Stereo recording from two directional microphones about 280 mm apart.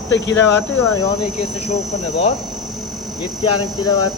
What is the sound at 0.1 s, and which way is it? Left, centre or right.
Speech, left.